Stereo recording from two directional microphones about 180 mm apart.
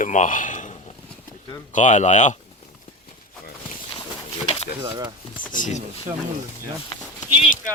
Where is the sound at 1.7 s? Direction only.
40° left (ahead or behind).